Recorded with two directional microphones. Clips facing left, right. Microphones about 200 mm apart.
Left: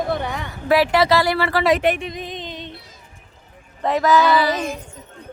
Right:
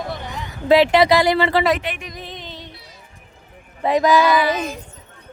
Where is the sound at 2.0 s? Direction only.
25° left (ahead or behind).